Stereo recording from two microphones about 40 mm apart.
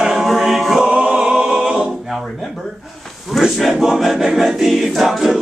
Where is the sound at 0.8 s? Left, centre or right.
Right.